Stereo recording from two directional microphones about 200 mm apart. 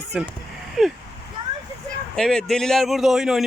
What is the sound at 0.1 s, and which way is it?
Speech, 5° right (ahead or behind).